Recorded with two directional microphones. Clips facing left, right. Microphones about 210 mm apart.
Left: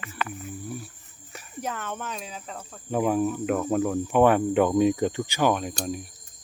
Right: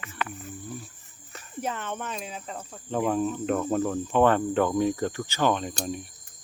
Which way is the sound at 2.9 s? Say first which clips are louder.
Left 2 dB; 10° left (ahead or behind).